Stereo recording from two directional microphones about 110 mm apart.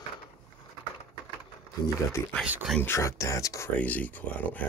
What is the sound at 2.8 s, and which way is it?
Speech, 25° left (ahead or behind).